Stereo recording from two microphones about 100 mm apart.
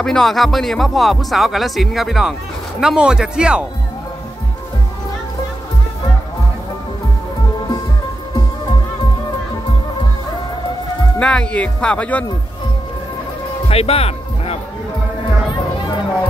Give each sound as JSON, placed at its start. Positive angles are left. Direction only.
{"t": 0.0, "sound": "speech", "side_deg": 5}
{"t": 11.1, "sound": "speech", "side_deg": 10}
{"t": 13.7, "sound": "music", "side_deg": 80}